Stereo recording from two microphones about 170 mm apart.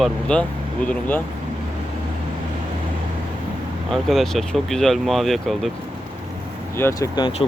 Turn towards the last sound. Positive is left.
turn(degrees=30)  # may be behind; listen again after turning